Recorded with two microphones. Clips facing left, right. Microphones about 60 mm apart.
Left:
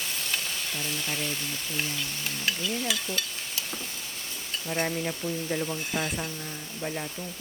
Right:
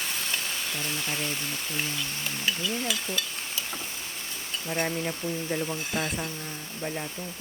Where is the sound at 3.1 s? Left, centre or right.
Right.